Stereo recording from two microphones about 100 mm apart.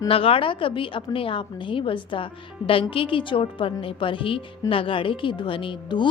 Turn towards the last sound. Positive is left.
turn(degrees=55)  # may be behind; listen again after turning